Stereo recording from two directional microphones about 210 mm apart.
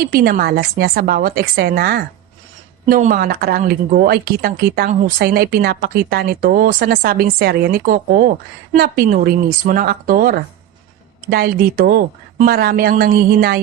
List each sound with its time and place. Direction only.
0.0 s speech: 45° right (ahead or behind)